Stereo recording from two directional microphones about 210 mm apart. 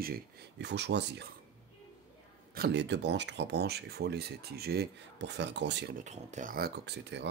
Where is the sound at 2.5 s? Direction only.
50° right (ahead or behind).